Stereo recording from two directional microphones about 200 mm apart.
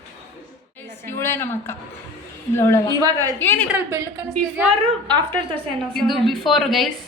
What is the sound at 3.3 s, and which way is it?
Speech, 10° left (ahead or behind).